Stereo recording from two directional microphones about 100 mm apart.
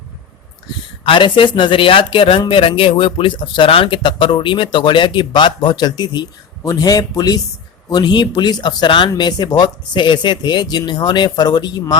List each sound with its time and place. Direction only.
1.0 s speech: 60° left (ahead or behind)